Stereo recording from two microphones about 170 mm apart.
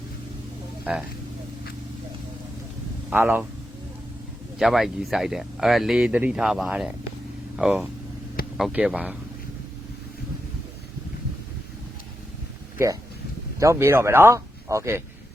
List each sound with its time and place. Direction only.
3.1 s speech: 10° right (ahead or behind)
4.5 s speech: centre (ahead or behind)
12.7 s speech: 20° right (ahead or behind)